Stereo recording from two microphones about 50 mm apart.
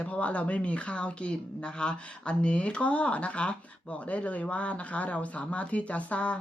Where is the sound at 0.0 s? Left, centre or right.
Left.